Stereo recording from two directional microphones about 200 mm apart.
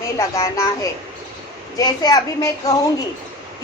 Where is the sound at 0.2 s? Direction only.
15° left (ahead or behind).